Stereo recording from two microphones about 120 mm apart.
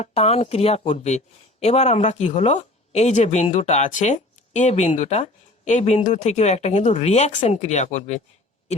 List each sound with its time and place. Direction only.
0.0 s speech: 55° left (ahead or behind)